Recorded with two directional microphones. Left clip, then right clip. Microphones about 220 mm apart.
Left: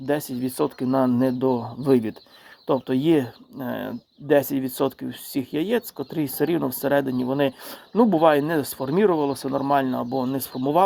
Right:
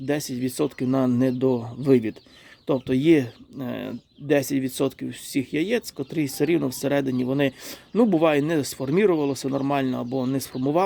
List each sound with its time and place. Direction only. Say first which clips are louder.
0.3 s speech: left 1 dB; 30° right (ahead or behind)